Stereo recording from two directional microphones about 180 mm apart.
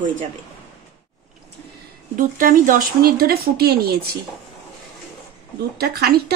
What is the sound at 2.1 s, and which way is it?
Speech, 50° right (ahead or behind).